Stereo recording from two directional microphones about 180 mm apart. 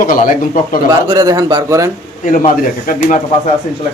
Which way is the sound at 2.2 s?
45° left (ahead or behind).